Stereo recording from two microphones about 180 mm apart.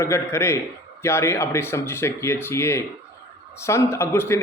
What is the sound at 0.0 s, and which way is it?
A man's voice, 15° left (ahead or behind).